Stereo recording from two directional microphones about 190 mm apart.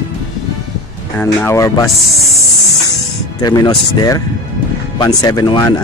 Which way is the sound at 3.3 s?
20° left (ahead or behind).